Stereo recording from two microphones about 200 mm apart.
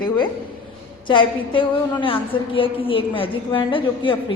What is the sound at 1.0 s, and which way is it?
A woman's voice, 25° left (ahead or behind).